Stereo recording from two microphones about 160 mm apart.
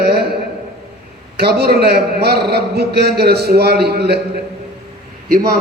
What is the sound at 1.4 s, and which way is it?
A man's voice, 85° right.